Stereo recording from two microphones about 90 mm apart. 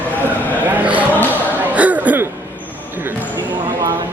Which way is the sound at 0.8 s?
15° right (ahead or behind).